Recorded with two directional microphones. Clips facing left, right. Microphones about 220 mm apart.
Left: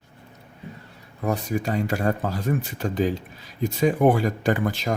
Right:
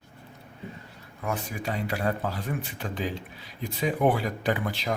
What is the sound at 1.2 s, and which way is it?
Speech, 40° left (ahead or behind).